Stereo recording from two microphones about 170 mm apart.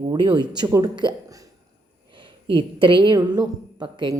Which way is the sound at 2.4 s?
30° right (ahead or behind).